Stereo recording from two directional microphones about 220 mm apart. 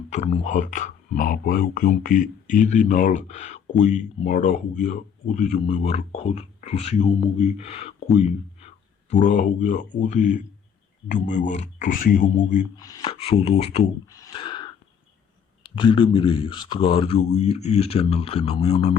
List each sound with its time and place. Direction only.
0.1 s speech: 30° left (ahead or behind)
12.7 s speech: 15° left (ahead or behind)
13.0 s speech: 25° left (ahead or behind)
14.1 s a sound: 20° left (ahead or behind)
15.7 s speech: 20° left (ahead or behind)